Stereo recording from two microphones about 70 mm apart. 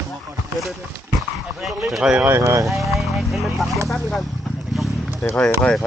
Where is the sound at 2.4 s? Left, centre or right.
Right.